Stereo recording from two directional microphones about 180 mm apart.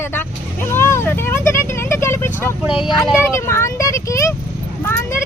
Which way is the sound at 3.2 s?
15° left (ahead or behind).